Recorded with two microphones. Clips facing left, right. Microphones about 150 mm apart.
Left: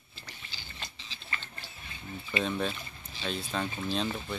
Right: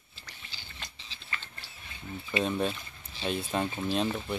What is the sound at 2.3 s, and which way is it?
Speech, 5° right (ahead or behind).